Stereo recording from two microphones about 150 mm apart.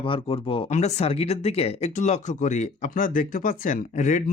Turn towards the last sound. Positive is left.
turn(degrees=55)  # may be behind; listen again after turning